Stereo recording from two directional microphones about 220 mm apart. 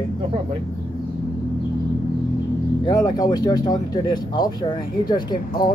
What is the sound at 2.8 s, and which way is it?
Speech, 20° left (ahead or behind).